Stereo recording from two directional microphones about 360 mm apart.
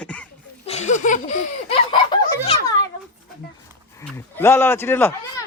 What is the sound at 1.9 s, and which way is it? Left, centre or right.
Fowl, centre.